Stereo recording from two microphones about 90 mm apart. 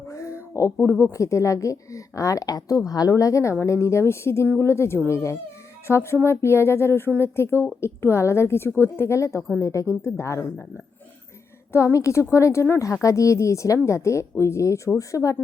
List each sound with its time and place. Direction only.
0.1 s a sound: 35° left (ahead or behind)
0.5 s a woman's voice: 30° left (ahead or behind)
11.7 s a woman's voice: 30° left (ahead or behind)